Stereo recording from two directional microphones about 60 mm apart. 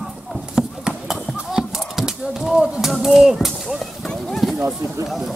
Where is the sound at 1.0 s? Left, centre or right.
Centre.